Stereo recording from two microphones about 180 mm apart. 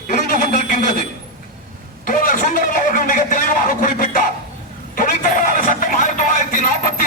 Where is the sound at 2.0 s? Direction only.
50° left (ahead or behind).